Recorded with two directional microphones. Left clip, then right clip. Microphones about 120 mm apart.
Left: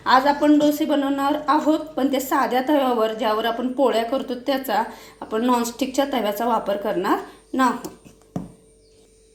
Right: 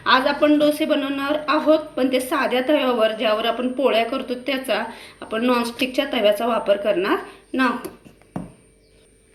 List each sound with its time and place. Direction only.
0.0 s a woman's voice: 45° left (ahead or behind)